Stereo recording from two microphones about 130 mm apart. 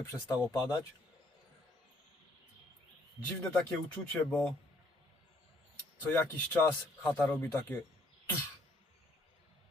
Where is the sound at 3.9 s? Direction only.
10° left (ahead or behind).